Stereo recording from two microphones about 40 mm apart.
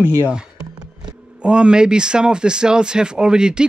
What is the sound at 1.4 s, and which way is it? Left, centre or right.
Speech, right.